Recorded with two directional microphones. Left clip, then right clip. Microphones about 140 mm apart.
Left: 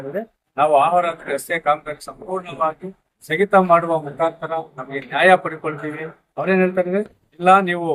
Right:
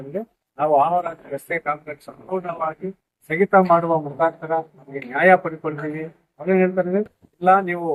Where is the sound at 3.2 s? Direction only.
30° left (ahead or behind).